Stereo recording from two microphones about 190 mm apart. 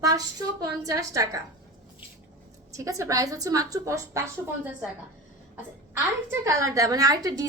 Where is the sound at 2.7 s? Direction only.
15° right (ahead or behind).